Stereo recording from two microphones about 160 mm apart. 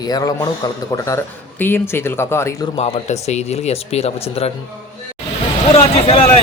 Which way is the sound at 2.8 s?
40° left (ahead or behind).